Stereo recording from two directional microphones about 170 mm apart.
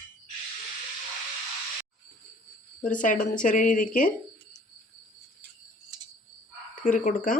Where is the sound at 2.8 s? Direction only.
50° left (ahead or behind).